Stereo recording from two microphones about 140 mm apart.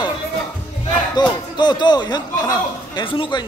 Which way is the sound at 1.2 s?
30° left (ahead or behind).